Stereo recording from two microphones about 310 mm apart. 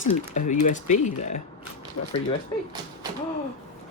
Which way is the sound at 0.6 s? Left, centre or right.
Left.